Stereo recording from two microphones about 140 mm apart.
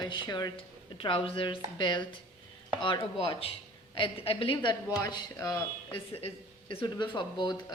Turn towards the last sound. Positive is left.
turn(degrees=35)  # may be behind; listen again after turning